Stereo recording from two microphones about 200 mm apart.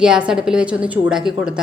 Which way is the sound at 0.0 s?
5° right (ahead or behind).